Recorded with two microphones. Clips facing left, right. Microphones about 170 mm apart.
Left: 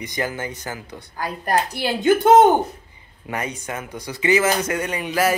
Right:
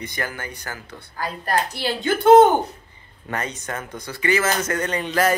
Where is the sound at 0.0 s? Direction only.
15° left (ahead or behind).